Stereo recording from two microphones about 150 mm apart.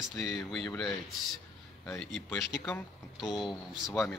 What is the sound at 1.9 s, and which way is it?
Speech, 5° left (ahead or behind).